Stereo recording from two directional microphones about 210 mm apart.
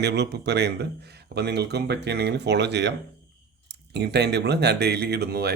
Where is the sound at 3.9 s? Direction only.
50° right (ahead or behind).